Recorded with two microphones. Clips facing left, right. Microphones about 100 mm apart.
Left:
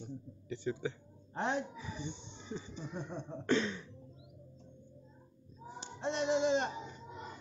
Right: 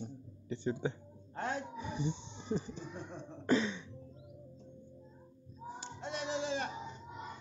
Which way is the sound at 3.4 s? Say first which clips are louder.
Right 1 dB; 10° right (ahead or behind).